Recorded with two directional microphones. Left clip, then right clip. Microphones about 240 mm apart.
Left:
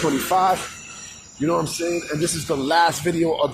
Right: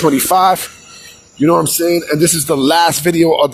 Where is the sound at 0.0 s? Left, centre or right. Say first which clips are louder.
Right 8 dB; right.